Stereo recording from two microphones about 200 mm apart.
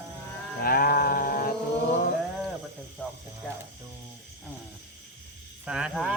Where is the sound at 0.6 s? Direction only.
50° left (ahead or behind).